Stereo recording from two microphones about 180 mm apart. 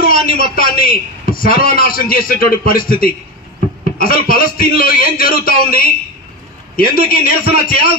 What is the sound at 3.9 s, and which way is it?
A man's voice, 55° left (ahead or behind).